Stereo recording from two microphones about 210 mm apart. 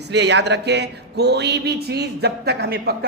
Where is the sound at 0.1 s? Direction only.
55° right (ahead or behind).